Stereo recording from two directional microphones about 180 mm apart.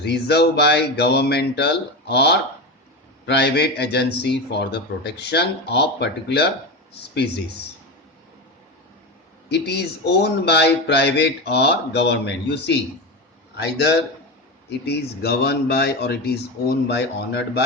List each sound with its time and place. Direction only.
0.0 s a man's voice: 65° left (ahead or behind)
9.5 s a man's voice: 65° left (ahead or behind)